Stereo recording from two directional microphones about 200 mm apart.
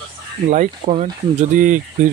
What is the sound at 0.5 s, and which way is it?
Speech, 35° right (ahead or behind).